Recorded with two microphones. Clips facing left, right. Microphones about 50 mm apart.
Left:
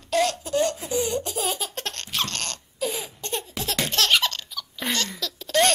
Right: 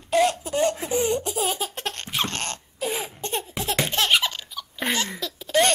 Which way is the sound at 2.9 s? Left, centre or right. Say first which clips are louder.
Right 3 dB; right.